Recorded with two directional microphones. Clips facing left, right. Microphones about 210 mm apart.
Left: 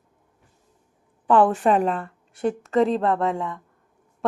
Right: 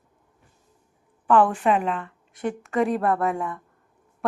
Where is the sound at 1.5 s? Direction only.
35° left (ahead or behind).